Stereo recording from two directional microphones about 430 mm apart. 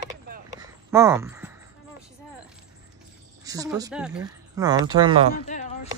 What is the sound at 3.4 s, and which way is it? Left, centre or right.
Speech, centre.